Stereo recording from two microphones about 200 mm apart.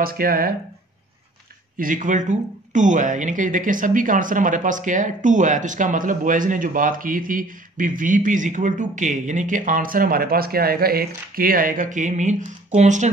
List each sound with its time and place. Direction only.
0.0 s speech: 45° right (ahead or behind)
1.8 s speech: 40° right (ahead or behind)